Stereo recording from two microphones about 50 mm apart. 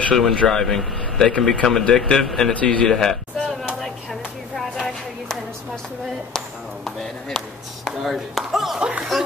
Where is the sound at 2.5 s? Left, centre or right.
Left.